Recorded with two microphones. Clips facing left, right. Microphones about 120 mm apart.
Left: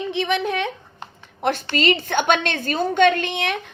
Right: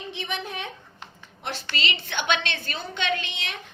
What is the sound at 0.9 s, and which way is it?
A woman's voice, 50° left (ahead or behind).